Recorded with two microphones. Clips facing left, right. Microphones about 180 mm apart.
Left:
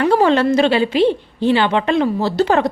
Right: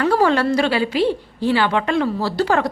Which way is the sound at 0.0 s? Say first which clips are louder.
Left 3 dB; 20° left (ahead or behind).